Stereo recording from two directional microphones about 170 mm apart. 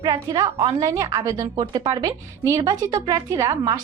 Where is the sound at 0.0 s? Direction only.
25° right (ahead or behind).